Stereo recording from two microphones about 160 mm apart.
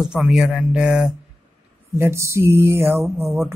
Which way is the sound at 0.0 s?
5° right (ahead or behind).